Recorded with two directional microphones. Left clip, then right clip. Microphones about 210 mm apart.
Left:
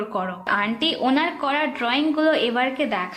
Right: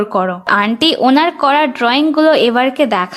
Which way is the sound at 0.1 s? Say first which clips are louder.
Right 8 dB; 50° right (ahead or behind).